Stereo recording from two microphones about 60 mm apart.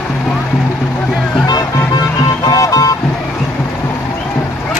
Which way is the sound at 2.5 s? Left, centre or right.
Left.